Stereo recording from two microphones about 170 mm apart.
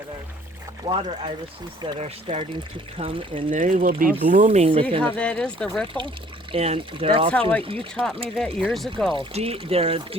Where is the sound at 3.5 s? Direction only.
50° right (ahead or behind); by 4.9 s 35° right (ahead or behind).